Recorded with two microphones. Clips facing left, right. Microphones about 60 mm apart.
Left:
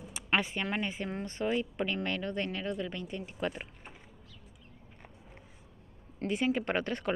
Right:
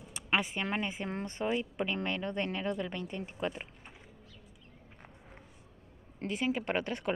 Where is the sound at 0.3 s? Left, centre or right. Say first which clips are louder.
Left 1 dB; centre; by 2.7 s right.